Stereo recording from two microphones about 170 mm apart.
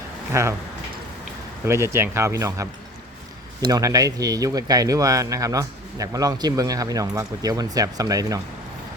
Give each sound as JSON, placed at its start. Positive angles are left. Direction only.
{"t": 0.3, "sound": "speech", "side_deg": -15}
{"t": 1.6, "sound": "speech", "side_deg": -15}